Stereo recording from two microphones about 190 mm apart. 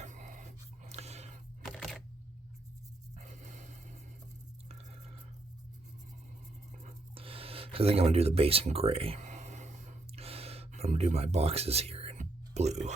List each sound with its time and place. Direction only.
0.0 s dog: 40° right (ahead or behind)
1.6 s camera: centre (ahead or behind)
3.2 s a sound: 40° right (ahead or behind)
6.8 s writing: 30° right (ahead or behind)